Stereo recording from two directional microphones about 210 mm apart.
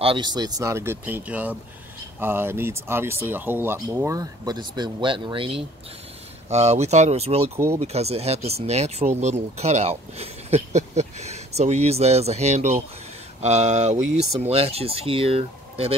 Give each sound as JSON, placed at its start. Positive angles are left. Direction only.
{"t": 0.0, "sound": "speech", "side_deg": -20}
{"t": 7.5, "sound": "speech", "side_deg": -10}
{"t": 7.8, "sound": "speech", "side_deg": -30}